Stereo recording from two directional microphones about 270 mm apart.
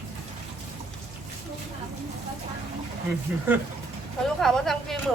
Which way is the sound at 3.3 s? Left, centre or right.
Centre.